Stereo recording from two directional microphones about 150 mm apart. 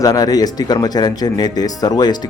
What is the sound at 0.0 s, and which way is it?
Speech, 25° left (ahead or behind).